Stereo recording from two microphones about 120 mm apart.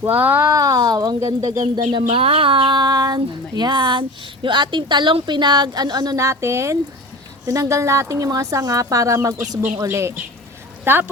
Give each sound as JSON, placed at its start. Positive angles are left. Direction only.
{"t": 0.0, "sound": "speech", "side_deg": -15}
{"t": 0.5, "sound": "a woman's voice", "side_deg": -30}
{"t": 2.1, "sound": "a woman's voice", "side_deg": -50}